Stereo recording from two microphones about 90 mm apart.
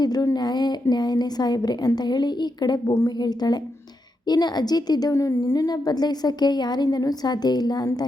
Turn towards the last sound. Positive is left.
turn(degrees=50)  # may be behind; listen again after turning